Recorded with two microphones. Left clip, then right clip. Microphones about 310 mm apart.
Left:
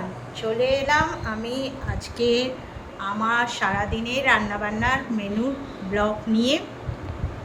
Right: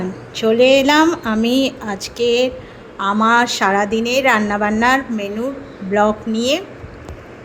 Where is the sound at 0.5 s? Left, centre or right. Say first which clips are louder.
Right 9 dB; centre.